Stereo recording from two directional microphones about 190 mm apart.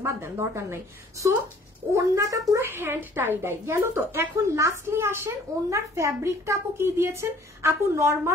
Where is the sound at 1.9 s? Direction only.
15° right (ahead or behind).